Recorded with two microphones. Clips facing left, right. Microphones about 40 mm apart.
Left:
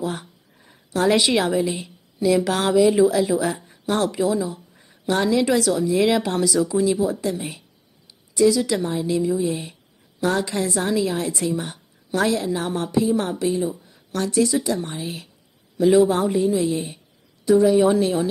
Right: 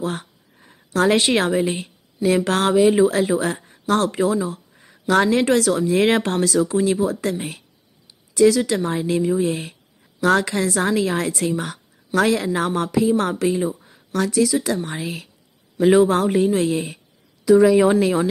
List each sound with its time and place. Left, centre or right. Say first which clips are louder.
0.0 s a woman's voice: right 1 dB; right
2.7 s speech: even; right
4.5 s speech: right 2 dB; right
10.2 s a woman's voice: right 4 dB; right
13.2 s a woman's voice: right 2 dB; right
15.8 s a woman's voice: right 1 dB; right